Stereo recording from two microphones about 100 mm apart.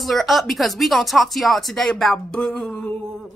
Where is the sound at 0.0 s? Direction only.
Centre (ahead or behind).